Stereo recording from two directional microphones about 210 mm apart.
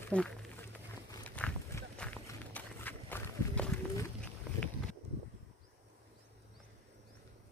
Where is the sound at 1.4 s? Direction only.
5° left (ahead or behind).